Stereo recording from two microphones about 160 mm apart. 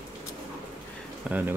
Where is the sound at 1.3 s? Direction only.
10° right (ahead or behind).